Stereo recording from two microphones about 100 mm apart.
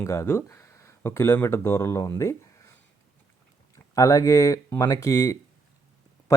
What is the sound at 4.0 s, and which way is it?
Speech, 30° left (ahead or behind).